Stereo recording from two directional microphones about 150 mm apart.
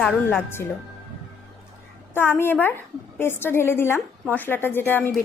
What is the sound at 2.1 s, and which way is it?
A woman's voice, 15° left (ahead or behind).